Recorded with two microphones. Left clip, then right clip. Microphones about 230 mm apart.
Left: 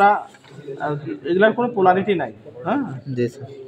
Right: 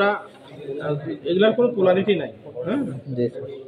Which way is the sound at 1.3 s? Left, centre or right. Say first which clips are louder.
Left 1 dB; centre.